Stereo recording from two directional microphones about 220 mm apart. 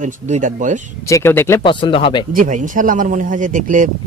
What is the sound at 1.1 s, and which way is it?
Speech, 10° left (ahead or behind).